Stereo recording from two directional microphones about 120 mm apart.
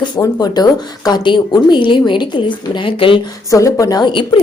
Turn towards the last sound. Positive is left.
turn(degrees=40)  # may be behind; listen again after turning